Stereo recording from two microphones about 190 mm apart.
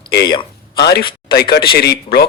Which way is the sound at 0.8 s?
55° left (ahead or behind).